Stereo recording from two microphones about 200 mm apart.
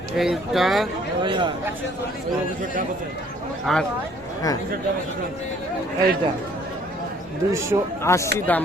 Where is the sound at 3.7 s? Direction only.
Centre (ahead or behind).